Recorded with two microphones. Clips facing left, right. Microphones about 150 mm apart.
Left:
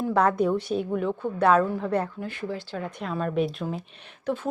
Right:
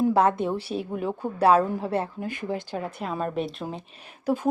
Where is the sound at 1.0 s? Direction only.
35° right (ahead or behind).